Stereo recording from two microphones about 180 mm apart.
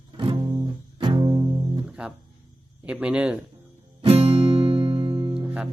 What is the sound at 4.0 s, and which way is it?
Music, 35° right (ahead or behind).